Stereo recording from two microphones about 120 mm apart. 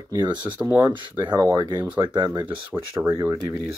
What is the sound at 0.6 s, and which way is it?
Speech, 10° right (ahead or behind).